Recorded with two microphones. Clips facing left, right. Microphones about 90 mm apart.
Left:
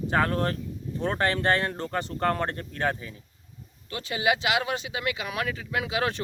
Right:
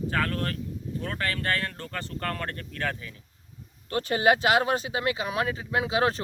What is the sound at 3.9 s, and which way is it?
Speech, 45° right (ahead or behind).